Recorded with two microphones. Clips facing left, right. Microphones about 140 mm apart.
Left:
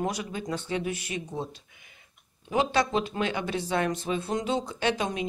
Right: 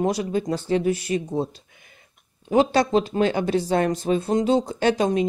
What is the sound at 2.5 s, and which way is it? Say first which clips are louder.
Speech: right 7 dB; 40° right (ahead or behind).